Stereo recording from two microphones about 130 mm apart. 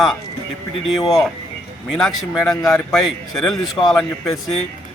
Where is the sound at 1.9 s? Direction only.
5° left (ahead or behind).